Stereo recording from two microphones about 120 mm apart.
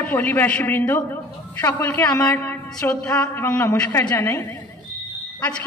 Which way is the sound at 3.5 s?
25° left (ahead or behind).